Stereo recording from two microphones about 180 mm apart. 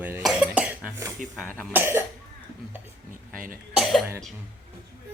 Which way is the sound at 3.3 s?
50° right (ahead or behind).